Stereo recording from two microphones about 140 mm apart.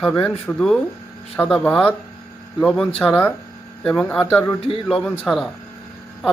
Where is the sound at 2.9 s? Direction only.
10° left (ahead or behind).